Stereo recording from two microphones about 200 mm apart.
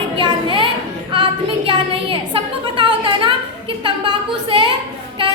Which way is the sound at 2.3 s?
25° right (ahead or behind).